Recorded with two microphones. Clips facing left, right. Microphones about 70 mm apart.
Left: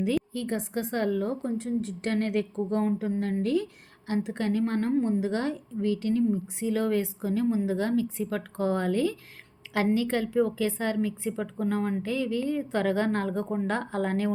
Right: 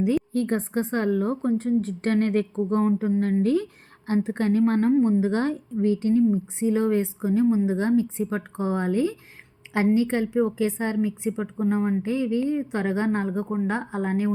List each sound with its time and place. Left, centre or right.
0.3 s a woman's voice: right
4.9 s a woman's voice: right